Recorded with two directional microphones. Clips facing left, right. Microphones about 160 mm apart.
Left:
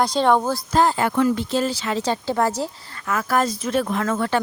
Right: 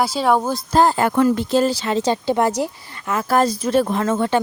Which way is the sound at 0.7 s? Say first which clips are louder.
Right 3 dB; 40° right (ahead or behind).